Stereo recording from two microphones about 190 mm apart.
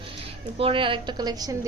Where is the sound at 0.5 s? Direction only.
30° right (ahead or behind).